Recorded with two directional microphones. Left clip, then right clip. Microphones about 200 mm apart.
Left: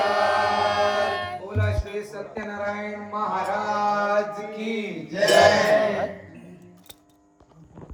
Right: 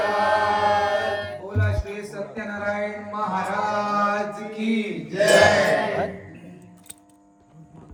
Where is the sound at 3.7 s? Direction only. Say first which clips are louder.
Even; 50° left (ahead or behind).